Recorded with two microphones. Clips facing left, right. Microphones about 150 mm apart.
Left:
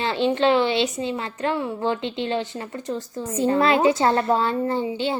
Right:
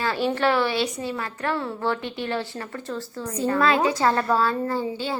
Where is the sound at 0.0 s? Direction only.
25° left (ahead or behind).